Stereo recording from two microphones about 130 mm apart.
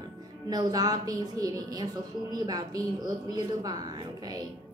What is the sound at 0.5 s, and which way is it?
A woman's voice, 30° right (ahead or behind).